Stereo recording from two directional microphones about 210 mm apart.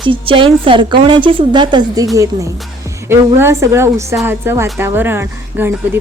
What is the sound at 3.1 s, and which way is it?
Speech, 10° right (ahead or behind).